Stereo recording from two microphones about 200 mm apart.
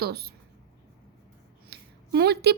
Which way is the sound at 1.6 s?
55° right (ahead or behind).